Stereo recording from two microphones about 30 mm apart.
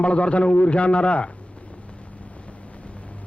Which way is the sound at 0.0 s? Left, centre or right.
Left.